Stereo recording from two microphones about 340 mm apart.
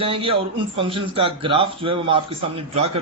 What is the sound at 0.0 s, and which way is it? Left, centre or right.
A man's voice, centre.